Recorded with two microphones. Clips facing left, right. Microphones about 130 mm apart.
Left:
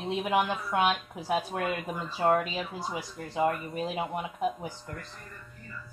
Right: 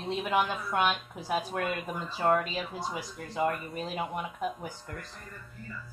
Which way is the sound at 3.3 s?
Centre (ahead or behind).